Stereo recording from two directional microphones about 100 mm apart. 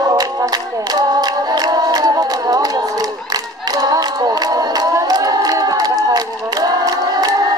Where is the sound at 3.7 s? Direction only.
40° right (ahead or behind).